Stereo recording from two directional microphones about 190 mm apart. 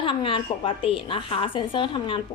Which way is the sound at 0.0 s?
25° left (ahead or behind).